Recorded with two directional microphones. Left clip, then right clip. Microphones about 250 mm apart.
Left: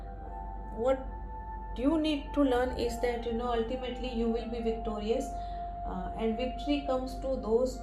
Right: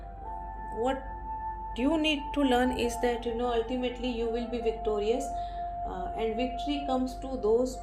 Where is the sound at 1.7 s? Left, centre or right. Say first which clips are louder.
Right 2 dB; right.